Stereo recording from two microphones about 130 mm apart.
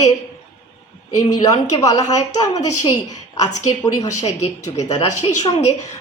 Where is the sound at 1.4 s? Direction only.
25° left (ahead or behind).